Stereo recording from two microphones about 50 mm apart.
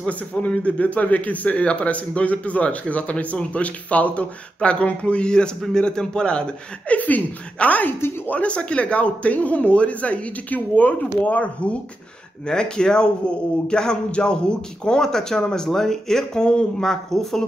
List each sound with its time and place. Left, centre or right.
0.1 s a man's voice: left
7.0 s a woman's voice: left
12.4 s a man's voice: centre